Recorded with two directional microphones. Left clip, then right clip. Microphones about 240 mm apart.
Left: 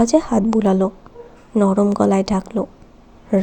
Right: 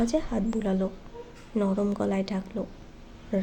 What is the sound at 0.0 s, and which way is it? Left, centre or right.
A woman's voice, left.